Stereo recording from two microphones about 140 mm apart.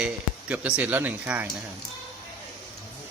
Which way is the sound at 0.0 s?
10° right (ahead or behind).